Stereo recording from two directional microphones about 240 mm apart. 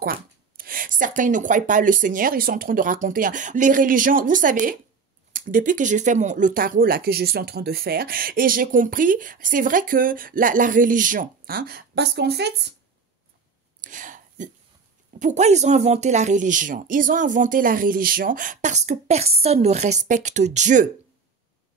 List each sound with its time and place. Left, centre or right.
0.0 s speech: right
13.7 s whispering: right
15.1 s speech: right